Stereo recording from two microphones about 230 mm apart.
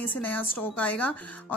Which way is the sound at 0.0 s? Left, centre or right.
Centre.